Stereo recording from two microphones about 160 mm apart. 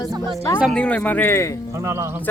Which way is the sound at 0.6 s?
5° left (ahead or behind).